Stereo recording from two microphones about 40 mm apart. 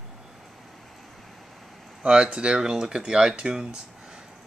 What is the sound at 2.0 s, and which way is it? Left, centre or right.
Speech, right.